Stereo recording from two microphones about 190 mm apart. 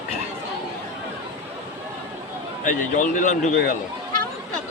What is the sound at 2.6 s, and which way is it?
A man's voice, 40° left (ahead or behind).